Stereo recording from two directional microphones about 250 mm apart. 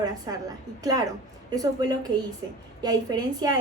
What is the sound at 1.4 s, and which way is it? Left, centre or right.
A woman's voice, centre.